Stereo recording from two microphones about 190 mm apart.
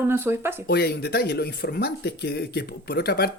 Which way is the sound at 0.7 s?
55° left (ahead or behind).